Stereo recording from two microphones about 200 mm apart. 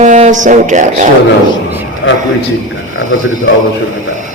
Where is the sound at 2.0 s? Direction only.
85° left.